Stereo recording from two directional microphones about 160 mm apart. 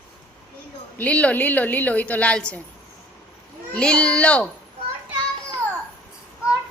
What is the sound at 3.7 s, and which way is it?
Speech, 5° left (ahead or behind).